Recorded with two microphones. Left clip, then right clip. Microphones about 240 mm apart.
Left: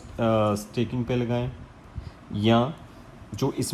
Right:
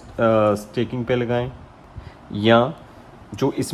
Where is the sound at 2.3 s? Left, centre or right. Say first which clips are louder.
Right 7 dB; right.